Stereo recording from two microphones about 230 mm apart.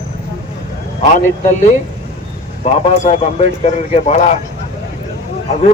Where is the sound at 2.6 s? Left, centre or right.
Left.